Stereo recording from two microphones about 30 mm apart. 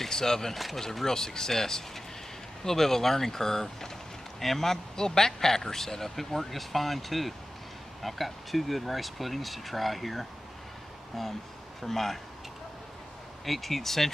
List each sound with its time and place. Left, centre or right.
0.1 s speech: centre
13.5 s speech: centre